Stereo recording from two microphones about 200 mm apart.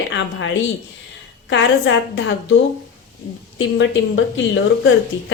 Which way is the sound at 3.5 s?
70° left (ahead or behind).